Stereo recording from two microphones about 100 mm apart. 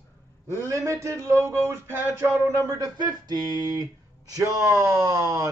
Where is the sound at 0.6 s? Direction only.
30° right (ahead or behind).